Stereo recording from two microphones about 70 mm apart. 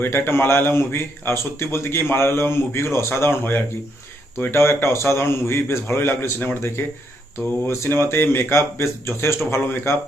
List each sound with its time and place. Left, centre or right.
0.0 s a man's voice: left